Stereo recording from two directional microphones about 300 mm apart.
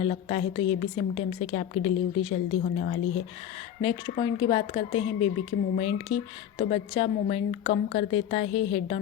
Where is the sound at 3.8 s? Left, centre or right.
Centre.